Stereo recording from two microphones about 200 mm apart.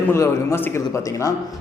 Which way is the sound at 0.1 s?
10° left (ahead or behind).